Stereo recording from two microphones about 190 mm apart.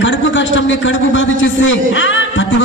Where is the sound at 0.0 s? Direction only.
75° left (ahead or behind).